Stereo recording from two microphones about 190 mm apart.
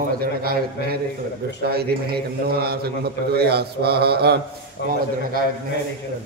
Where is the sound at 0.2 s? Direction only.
55° right (ahead or behind).